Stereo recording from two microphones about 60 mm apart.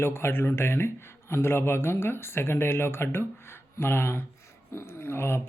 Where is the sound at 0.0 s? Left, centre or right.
Left.